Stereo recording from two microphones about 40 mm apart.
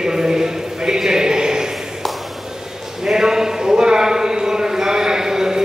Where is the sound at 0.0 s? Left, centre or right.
Centre.